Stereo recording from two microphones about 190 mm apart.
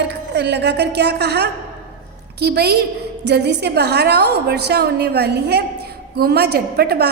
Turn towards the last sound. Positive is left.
turn(degrees=-55)  # may be behind; listen again after turning